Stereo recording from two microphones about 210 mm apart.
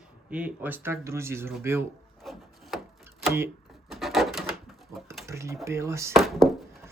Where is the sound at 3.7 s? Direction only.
Centre (ahead or behind).